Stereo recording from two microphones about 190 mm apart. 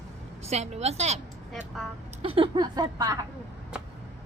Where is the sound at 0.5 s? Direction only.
35° right (ahead or behind).